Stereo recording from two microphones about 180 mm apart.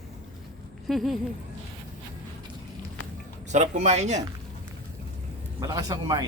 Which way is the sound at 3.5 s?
40° right (ahead or behind).